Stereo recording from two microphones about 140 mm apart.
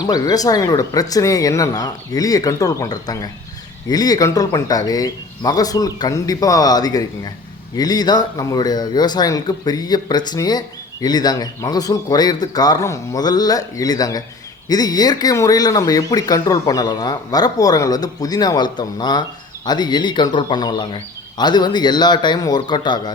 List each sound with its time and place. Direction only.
0.0 s a man's voice: 25° left (ahead or behind)